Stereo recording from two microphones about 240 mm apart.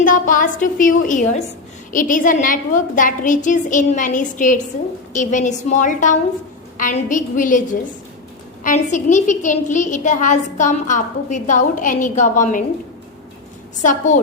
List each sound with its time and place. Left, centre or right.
0.0 s a woman's voice: left
13.8 s a woman's voice: left